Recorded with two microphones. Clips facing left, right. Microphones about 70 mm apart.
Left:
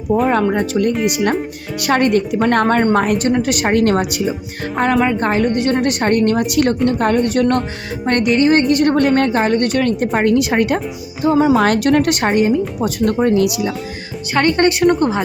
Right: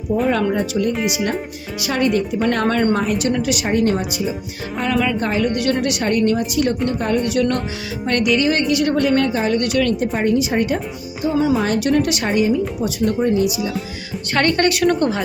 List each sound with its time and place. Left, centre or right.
0.5 s speech: left
3.7 s speech: left
4.8 s a woman's voice: left
6.8 s a woman's voice: left
10.1 s speech: left
11.2 s speech: left
11.5 s speech: left
14.3 s a woman's voice: centre
14.6 s a woman's voice: left